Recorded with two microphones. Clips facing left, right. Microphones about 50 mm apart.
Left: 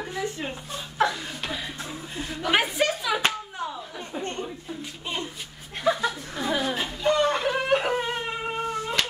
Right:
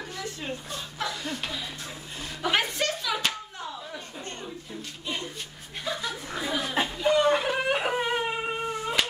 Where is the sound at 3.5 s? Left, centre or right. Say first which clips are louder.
Left 4 dB; left.